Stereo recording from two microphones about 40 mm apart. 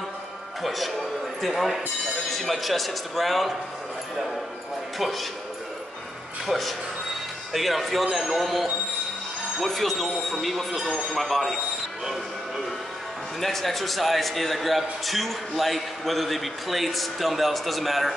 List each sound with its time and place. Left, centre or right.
0.6 s a man's voice: centre
4.9 s a man's voice: centre
6.4 s a man's voice: centre
13.4 s a man's voice: centre